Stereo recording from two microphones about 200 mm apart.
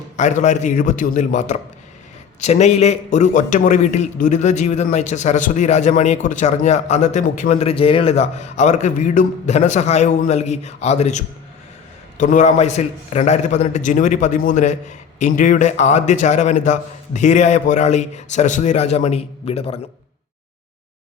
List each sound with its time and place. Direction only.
0.2 s a man's voice: 35° left (ahead or behind)